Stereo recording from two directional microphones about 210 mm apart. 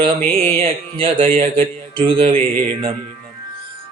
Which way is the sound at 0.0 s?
25° right (ahead or behind).